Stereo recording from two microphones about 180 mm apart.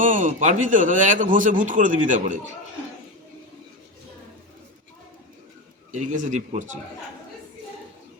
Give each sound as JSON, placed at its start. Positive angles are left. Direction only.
{"t": 0.0, "sound": "a man's voice", "side_deg": -45}
{"t": 5.9, "sound": "a man's voice", "side_deg": -40}